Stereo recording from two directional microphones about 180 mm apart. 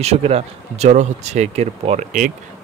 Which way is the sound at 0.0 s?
35° right (ahead or behind).